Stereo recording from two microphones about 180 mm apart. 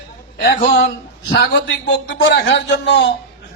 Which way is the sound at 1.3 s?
75° left (ahead or behind).